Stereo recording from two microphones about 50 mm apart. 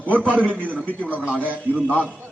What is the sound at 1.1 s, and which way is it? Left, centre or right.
Speech, right.